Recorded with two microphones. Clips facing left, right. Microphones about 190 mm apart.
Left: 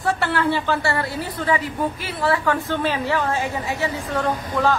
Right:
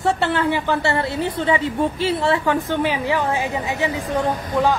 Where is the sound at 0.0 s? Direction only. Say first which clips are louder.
Right 2 dB; 20° right (ahead or behind).